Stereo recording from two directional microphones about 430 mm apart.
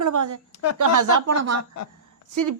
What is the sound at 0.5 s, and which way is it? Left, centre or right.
Speech, left.